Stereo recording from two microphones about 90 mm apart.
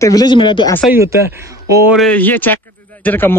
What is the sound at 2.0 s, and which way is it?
Speech, 20° left (ahead or behind).